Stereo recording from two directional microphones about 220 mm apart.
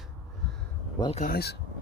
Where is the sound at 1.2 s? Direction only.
45° left (ahead or behind).